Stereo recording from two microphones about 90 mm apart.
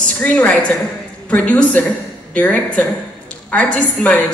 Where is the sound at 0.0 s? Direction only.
15° left (ahead or behind).